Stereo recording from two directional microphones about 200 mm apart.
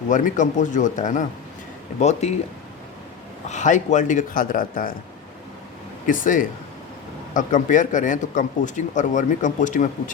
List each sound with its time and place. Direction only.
0.1 s speech: 40° left (ahead or behind)
3.5 s speech: 35° left (ahead or behind)
6.1 s speech: 40° left (ahead or behind)